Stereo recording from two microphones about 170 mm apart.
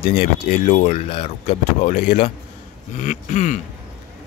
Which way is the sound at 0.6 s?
45° left (ahead or behind).